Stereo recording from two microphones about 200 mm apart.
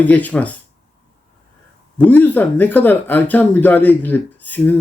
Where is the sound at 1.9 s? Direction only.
10° left (ahead or behind).